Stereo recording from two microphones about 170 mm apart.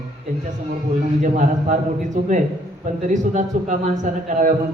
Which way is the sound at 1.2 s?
50° right (ahead or behind).